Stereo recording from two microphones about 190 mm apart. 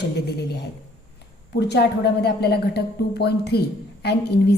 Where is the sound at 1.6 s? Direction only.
60° left (ahead or behind).